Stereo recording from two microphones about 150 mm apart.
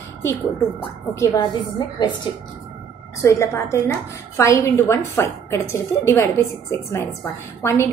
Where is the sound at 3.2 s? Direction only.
20° left (ahead or behind).